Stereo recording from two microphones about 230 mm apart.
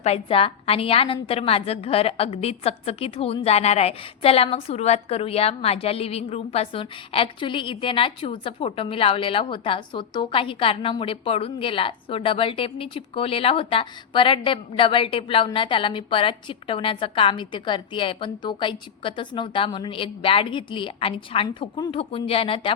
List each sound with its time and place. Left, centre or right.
0.0 s a woman's voice: left